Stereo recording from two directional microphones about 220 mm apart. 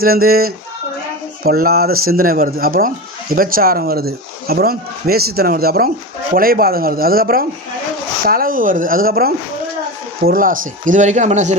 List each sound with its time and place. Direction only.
0.0 s a man's voice: 45° right (ahead or behind)